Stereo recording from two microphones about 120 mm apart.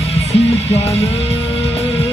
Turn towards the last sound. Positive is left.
turn(degrees=60)  # may be behind; listen again after turning